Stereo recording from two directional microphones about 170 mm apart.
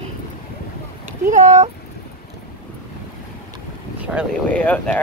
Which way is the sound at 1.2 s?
45° right (ahead or behind).